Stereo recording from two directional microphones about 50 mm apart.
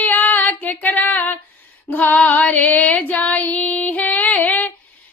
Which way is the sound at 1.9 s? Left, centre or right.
Left.